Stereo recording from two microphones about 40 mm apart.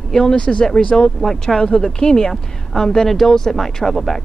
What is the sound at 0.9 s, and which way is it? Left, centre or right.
Speech, centre.